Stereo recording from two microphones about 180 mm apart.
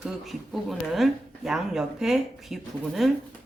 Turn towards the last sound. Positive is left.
turn(degrees=0)  # may be behind; listen again after turning